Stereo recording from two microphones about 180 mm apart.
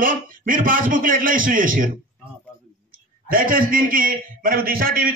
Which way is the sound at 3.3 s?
50° right (ahead or behind).